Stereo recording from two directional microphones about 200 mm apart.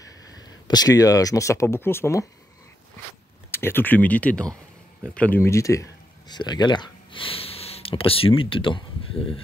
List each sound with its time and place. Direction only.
0.0 s speech: 20° left (ahead or behind)
3.5 s speech: 10° left (ahead or behind)
5.1 s a sound: 10° left (ahead or behind); by 8.8 s 25° left (ahead or behind)